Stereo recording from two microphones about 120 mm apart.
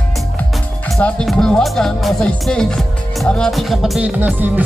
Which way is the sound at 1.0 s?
5° left (ahead or behind).